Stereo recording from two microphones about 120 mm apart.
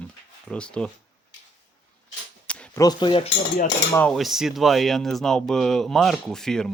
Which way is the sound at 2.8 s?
35° left (ahead or behind).